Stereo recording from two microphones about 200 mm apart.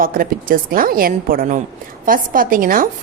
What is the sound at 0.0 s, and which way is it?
A woman's voice, 45° right (ahead or behind).